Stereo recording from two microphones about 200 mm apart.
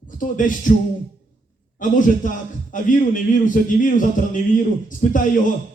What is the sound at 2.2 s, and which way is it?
Speech, 40° left (ahead or behind).